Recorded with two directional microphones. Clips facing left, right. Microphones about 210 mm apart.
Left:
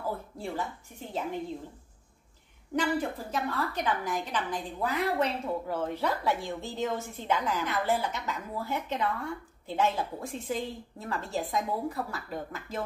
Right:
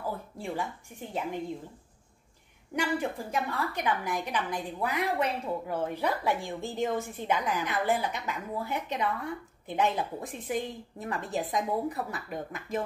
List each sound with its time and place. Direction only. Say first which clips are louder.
0.4 s a woman's voice: even; 15° right (ahead or behind)
2.7 s a woman's voice: left 1 dB; 10° right (ahead or behind)